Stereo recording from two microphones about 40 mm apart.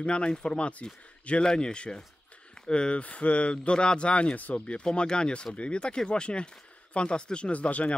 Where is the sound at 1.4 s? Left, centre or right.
Left.